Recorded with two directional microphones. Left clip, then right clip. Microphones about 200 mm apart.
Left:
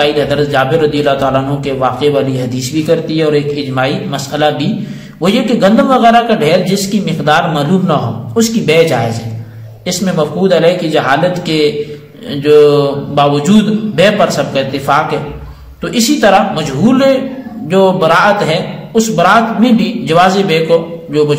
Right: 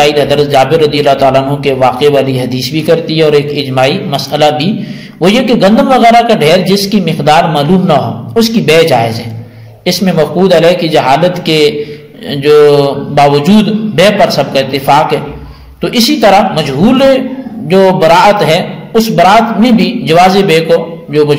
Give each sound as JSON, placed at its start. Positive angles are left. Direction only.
{"t": 0.0, "sound": "a man's voice", "side_deg": -25}